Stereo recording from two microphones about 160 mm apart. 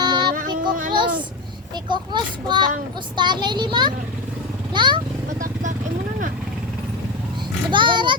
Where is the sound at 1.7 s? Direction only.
30° right (ahead or behind).